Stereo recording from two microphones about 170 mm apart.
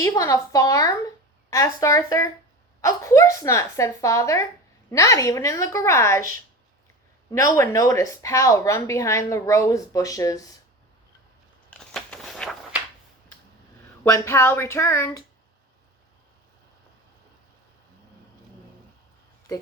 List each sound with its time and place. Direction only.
0.0 s a woman's voice: 20° left (ahead or behind)
7.3 s speech: 20° left (ahead or behind)
11.7 s a sound: 5° left (ahead or behind)
14.0 s a woman's voice: 10° left (ahead or behind)